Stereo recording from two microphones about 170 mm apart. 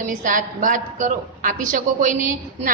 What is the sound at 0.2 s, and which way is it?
A woman's voice, 50° right (ahead or behind).